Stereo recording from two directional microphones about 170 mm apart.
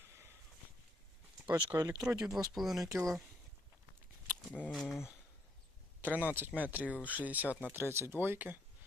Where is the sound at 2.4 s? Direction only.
Centre (ahead or behind).